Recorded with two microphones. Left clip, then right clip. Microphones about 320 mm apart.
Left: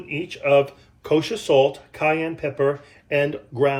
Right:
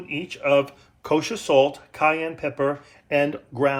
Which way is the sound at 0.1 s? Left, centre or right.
Centre.